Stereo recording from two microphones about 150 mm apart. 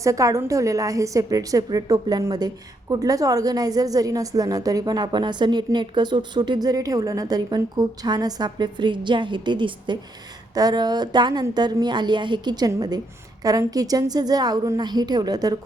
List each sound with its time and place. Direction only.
0.0 s a woman's voice: 20° right (ahead or behind)